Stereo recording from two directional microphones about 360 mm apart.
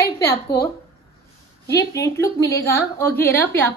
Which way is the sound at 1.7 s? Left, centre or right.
Centre.